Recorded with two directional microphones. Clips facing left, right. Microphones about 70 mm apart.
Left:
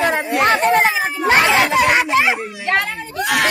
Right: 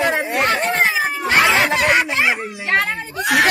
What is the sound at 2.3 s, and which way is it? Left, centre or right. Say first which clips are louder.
A child's voice: left 1 dB; centre.